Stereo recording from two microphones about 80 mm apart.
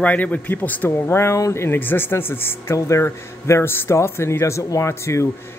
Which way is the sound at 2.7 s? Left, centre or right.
Left.